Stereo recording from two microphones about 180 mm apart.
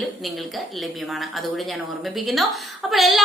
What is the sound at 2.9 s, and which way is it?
Speech, centre (ahead or behind).